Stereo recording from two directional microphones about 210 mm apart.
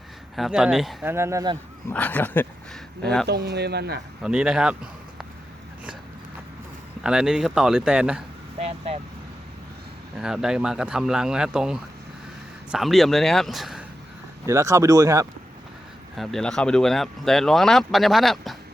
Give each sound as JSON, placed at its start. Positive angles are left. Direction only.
{"t": 0.3, "sound": "speech", "side_deg": 0}
{"t": 1.1, "sound": "speech", "side_deg": -15}
{"t": 1.9, "sound": "speech", "side_deg": 10}
{"t": 3.2, "sound": "speech", "side_deg": -50}
{"t": 4.2, "sound": "speech", "side_deg": -5}
{"t": 7.0, "sound": "speech", "side_deg": -5}
{"t": 8.5, "sound": "vehicle", "side_deg": -30}
{"t": 10.2, "sound": "speech", "side_deg": 0}
{"t": 14.4, "sound": "speech", "side_deg": -15}
{"t": 16.1, "sound": "speech", "side_deg": 0}